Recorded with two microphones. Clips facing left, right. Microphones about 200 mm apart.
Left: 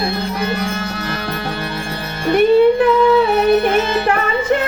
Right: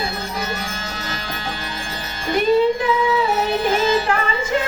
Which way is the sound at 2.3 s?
60° left (ahead or behind).